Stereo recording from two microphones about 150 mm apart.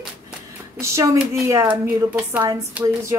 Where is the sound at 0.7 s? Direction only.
20° right (ahead or behind).